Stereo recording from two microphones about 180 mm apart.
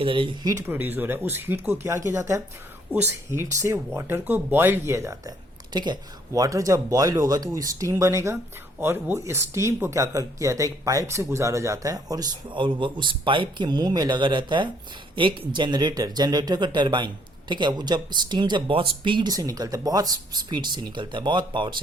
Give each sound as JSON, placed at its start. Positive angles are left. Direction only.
{"t": 0.0, "sound": "speech", "side_deg": -30}